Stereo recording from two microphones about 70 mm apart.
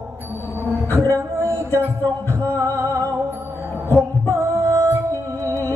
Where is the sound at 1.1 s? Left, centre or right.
Right.